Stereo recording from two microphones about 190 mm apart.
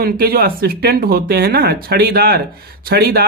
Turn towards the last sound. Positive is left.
turn(degrees=-55)  # may be behind; listen again after turning